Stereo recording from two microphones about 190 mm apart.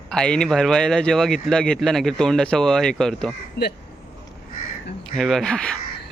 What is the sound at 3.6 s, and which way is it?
Speech, 60° left (ahead or behind).